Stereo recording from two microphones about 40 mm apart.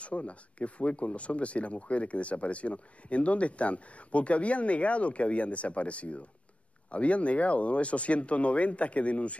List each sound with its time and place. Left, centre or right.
0.0 s speech: left